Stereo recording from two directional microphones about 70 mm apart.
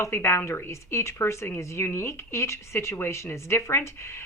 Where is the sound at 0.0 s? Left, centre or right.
Left.